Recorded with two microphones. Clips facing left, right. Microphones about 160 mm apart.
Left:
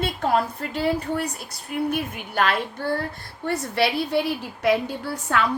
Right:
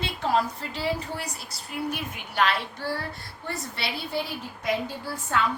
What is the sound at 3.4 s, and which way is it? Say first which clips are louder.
Speech: left 10 dB; 65° left (ahead or behind).